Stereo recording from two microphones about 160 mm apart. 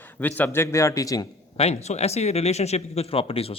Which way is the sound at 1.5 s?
40° left (ahead or behind).